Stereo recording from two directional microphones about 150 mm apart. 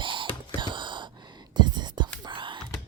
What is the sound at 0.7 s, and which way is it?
Gasp, 30° right (ahead or behind).